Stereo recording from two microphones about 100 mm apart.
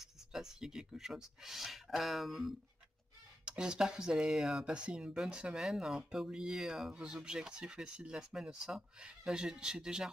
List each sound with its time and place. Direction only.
0.0 s speech: 5° right (ahead or behind)